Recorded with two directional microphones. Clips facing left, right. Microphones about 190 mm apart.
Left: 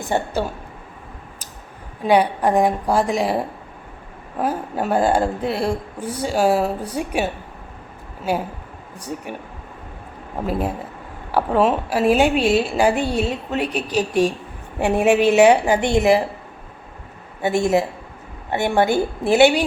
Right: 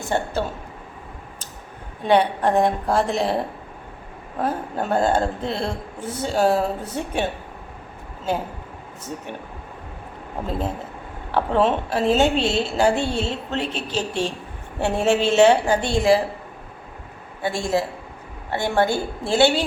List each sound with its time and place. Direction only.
0.1 s a woman's voice: 15° left (ahead or behind)
2.0 s a woman's voice: 10° left (ahead or behind)
4.4 s a woman's voice: 10° left (ahead or behind)
11.3 s a woman's voice: 10° left (ahead or behind)
17.4 s a woman's voice: 20° left (ahead or behind)